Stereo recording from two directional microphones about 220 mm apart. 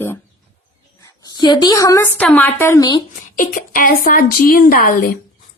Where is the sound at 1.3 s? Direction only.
20° left (ahead or behind).